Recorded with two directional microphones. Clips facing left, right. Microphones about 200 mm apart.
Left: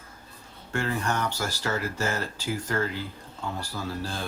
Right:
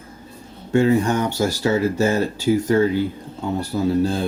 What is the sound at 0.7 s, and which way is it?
Speech, 20° right (ahead or behind).